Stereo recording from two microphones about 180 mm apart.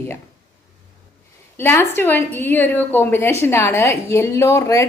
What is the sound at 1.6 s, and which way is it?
A woman's voice, 15° left (ahead or behind).